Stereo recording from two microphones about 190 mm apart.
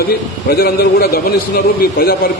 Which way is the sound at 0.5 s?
55° left (ahead or behind).